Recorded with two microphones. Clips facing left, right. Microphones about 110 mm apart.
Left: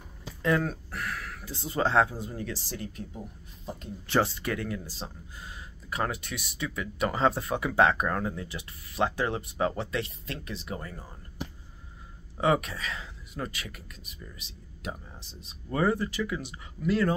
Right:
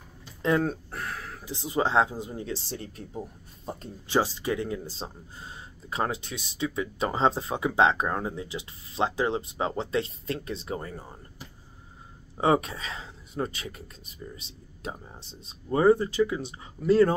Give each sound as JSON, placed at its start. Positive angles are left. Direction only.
{"t": 0.4, "sound": "a sound", "side_deg": -25}
{"t": 1.4, "sound": "speech", "side_deg": -20}
{"t": 4.1, "sound": "speech", "side_deg": -15}
{"t": 12.4, "sound": "speech", "side_deg": -30}